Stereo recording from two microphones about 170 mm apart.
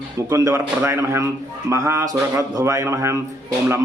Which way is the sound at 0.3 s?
15° right (ahead or behind).